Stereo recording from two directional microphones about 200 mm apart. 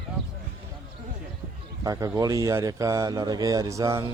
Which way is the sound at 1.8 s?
15° right (ahead or behind).